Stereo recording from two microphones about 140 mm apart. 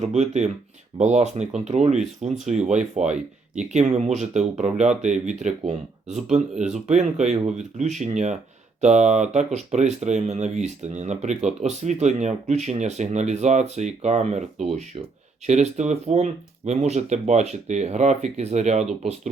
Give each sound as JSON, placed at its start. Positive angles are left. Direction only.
{"t": 0.0, "sound": "speech", "side_deg": -55}